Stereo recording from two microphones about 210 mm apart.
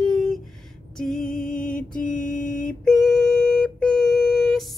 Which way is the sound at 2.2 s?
5° left (ahead or behind).